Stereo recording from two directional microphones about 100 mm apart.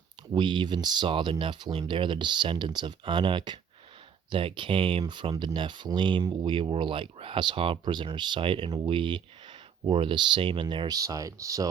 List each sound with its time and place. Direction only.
0.3 s speech: 50° right (ahead or behind); by 11.7 s 35° right (ahead or behind)